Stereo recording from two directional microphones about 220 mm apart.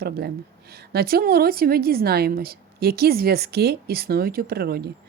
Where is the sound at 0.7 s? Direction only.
45° right (ahead or behind).